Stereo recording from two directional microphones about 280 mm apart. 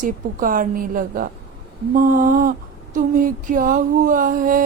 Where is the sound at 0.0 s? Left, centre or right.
Right.